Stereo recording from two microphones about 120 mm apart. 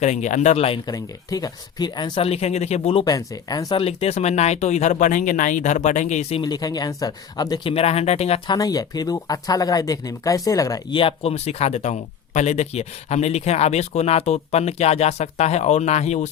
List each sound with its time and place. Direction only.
0.0 s speech: 80° left; by 0.8 s 60° left (ahead or behind)
0.9 s speech: 30° left (ahead or behind)
2.2 s speech: 60° left (ahead or behind)
3.1 s speech: 30° left (ahead or behind)
3.8 s speech: 55° left (ahead or behind); by 6.4 s 75° left (ahead or behind)
6.4 s speech: 35° left (ahead or behind)
7.7 s speech: 55° left (ahead or behind)
8.4 s speech: 30° left (ahead or behind)
10.9 s speech: 50° left (ahead or behind); by 16.3 s 70° left (ahead or behind)